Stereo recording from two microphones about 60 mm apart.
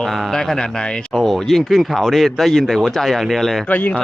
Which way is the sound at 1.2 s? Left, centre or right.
Centre.